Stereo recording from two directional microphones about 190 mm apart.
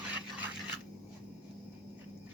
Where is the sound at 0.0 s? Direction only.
5° right (ahead or behind).